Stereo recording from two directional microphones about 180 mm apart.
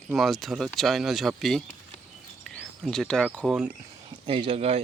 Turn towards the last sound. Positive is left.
turn(degrees=-35)  # may be behind; listen again after turning